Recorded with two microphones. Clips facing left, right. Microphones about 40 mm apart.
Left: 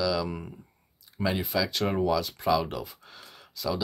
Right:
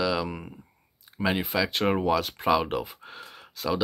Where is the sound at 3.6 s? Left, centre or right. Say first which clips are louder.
Right 1 dB; right.